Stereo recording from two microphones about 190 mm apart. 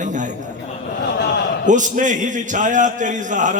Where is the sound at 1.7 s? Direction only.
40° right (ahead or behind).